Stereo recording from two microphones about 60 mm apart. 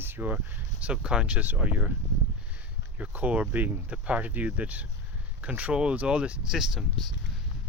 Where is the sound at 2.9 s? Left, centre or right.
Right; by 7.1 s centre.